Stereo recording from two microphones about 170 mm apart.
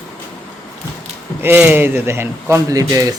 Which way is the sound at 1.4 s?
10° right (ahead or behind).